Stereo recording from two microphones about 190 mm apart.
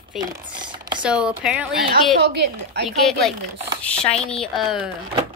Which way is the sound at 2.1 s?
60° right (ahead or behind).